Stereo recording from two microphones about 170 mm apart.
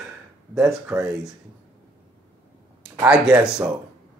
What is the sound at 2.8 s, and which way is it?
Speech, 5° right (ahead or behind).